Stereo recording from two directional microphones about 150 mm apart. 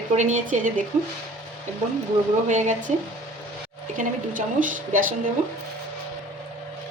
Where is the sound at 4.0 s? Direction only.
60° right (ahead or behind).